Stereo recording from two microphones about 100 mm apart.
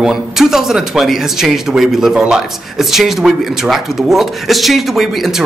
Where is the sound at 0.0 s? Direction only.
5° right (ahead or behind).